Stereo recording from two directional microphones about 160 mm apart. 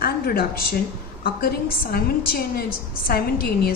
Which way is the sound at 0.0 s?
70° left (ahead or behind).